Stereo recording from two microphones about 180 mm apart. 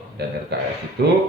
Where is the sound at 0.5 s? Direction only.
65° right (ahead or behind).